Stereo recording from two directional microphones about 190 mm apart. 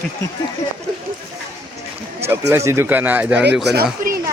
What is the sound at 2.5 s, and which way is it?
Speech, 15° right (ahead or behind).